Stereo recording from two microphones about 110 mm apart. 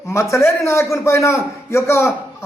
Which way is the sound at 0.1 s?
25° left (ahead or behind).